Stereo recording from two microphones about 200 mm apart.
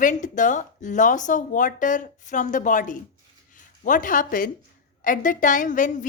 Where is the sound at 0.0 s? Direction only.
40° left (ahead or behind).